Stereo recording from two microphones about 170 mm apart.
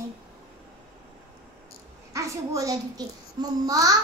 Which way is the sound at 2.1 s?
20° right (ahead or behind).